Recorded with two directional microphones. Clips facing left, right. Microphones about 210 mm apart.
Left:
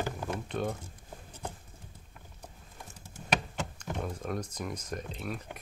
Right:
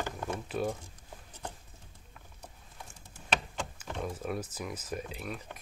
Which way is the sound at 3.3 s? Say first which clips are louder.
Left 2 dB; 5° left (ahead or behind).